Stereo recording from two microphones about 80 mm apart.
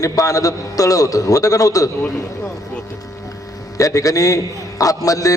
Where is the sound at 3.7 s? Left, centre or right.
Left.